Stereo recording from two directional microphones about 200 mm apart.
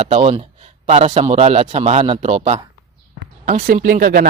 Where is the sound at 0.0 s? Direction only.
35° right (ahead or behind).